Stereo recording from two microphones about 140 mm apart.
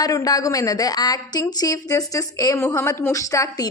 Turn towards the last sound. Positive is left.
turn(degrees=20)  # may be behind; listen again after turning